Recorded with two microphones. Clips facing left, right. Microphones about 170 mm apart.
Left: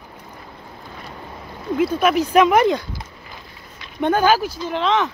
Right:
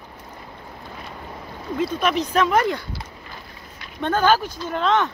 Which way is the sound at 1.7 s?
5° left (ahead or behind).